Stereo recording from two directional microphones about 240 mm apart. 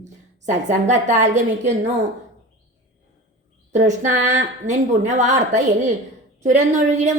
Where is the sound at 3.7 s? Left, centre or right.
Right.